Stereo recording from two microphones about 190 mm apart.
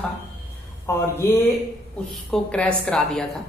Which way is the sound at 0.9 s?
15° left (ahead or behind).